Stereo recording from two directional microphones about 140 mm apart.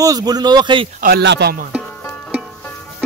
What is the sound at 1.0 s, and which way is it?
Speech, 85° right.